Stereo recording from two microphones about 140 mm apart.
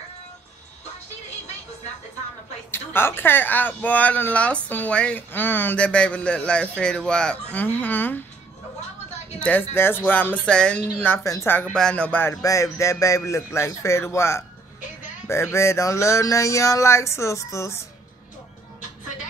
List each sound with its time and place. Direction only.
2.7 s speech: 15° left (ahead or behind)
9.4 s speech: 15° left (ahead or behind)
13.0 s a sound: 20° left (ahead or behind)